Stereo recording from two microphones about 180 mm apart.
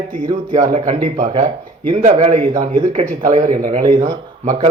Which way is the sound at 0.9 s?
45° right (ahead or behind).